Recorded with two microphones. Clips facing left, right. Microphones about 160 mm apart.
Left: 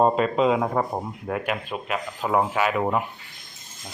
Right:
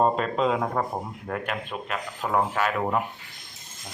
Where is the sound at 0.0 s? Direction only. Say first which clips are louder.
Left 3 dB; 5° left (ahead or behind).